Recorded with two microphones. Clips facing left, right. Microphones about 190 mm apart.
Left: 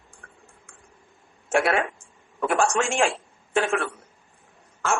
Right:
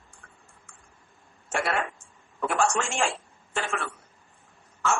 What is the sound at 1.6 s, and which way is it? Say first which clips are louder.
Speech: left 6 dB; 60° left (ahead or behind).